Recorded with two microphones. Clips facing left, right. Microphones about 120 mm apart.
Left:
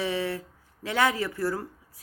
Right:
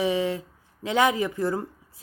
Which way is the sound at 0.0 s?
15° right (ahead or behind).